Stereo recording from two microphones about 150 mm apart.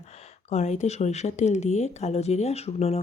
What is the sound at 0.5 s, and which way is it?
Speech, 50° left (ahead or behind).